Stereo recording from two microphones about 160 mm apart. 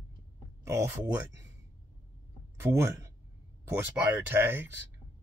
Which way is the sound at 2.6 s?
15° right (ahead or behind).